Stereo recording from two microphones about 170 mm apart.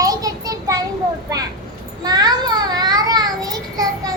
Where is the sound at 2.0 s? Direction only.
25° right (ahead or behind).